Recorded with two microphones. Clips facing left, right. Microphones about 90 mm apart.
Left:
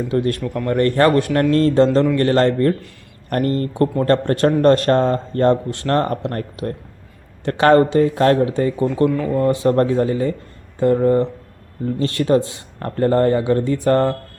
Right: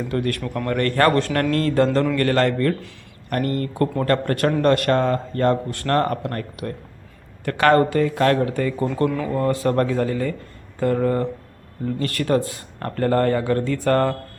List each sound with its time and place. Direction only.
0.1 s speech: 20° left (ahead or behind)
9.0 s speech: centre (ahead or behind)
9.4 s speech: 20° left (ahead or behind)